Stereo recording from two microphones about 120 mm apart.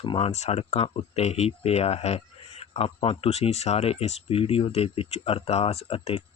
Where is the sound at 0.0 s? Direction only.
50° left (ahead or behind).